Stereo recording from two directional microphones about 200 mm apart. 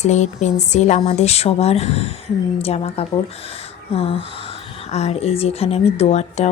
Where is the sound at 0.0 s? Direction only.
35° left (ahead or behind).